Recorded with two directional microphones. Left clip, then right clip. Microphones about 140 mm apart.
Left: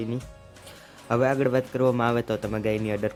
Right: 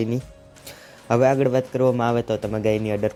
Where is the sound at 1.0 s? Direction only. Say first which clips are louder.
Right 5 dB; 15° right (ahead or behind).